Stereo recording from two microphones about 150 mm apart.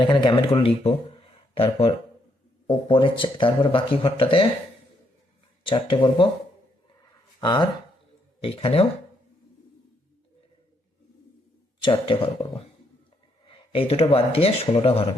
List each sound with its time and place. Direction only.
0.0 s speech: 30° left (ahead or behind)
5.6 s speech: 35° left (ahead or behind)
7.4 s speech: 30° left (ahead or behind)
11.8 s speech: 35° left (ahead or behind)